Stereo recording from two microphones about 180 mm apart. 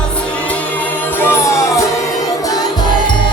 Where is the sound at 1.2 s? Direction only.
15° left (ahead or behind).